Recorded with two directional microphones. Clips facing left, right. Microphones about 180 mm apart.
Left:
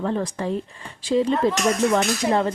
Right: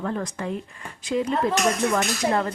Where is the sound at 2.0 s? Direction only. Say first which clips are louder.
Left 3 dB; 20° left (ahead or behind).